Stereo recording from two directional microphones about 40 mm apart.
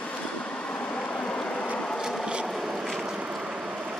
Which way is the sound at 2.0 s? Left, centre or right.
Right.